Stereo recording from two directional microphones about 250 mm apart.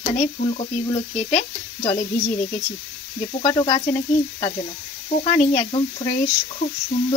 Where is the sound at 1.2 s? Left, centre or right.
Left.